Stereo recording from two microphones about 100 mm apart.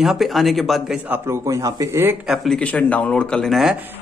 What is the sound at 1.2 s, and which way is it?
Speech, 35° right (ahead or behind).